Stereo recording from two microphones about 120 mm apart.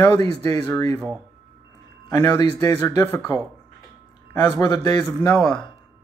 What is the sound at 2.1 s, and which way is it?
Speech, 30° left (ahead or behind).